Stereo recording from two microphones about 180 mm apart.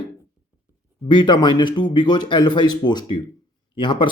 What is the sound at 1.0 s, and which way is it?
Speech, 25° left (ahead or behind).